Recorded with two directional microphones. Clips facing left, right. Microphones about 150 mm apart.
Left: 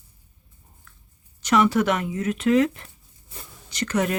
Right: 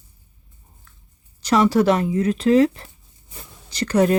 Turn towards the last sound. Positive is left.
turn(degrees=-35)  # may be behind; listen again after turning